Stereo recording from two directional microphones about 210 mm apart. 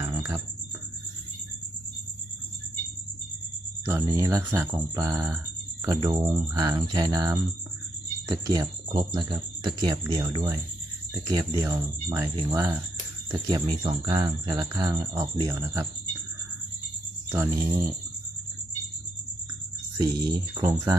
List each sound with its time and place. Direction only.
0.0 s a sound: 15° right (ahead or behind)
3.8 s speech: 15° right (ahead or behind)
17.2 s speech: 10° right (ahead or behind)
20.0 s speech: 20° right (ahead or behind)